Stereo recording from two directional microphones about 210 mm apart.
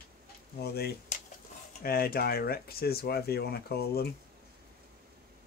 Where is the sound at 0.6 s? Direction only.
50° left (ahead or behind).